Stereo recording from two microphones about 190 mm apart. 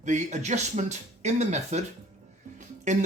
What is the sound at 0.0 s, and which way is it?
Speech, 40° right (ahead or behind).